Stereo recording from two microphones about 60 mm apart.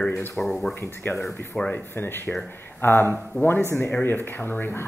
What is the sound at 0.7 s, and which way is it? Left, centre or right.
Speech, left.